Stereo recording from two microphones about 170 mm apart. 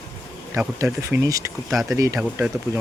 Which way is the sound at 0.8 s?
15° right (ahead or behind).